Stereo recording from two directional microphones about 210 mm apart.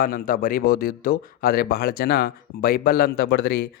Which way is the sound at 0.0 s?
45° left (ahead or behind).